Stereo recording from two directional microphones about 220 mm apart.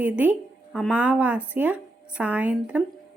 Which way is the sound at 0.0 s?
5° right (ahead or behind).